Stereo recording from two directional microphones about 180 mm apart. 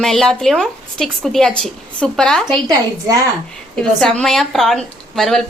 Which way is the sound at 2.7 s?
20° right (ahead or behind).